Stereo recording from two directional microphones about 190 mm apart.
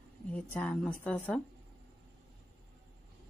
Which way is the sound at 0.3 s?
5° left (ahead or behind).